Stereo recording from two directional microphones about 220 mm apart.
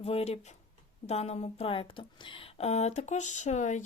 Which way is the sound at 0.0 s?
25° left (ahead or behind).